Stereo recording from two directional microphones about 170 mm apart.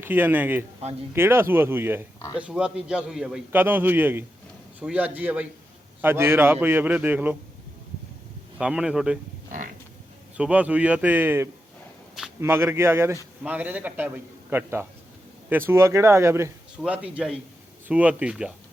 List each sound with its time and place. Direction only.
0.0 s a man's voice: 10° right (ahead or behind)
8.5 s speech: 5° right (ahead or behind)
10.3 s a man's voice: 10° right (ahead or behind)